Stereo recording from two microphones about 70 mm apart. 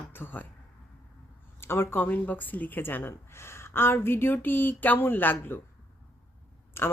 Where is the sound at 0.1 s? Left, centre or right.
Left.